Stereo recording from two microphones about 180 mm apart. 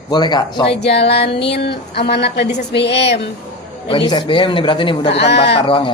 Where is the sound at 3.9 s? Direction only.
25° left (ahead or behind).